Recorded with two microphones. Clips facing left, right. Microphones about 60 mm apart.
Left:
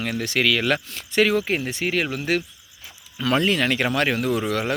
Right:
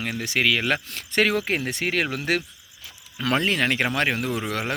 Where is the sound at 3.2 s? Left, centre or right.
Right.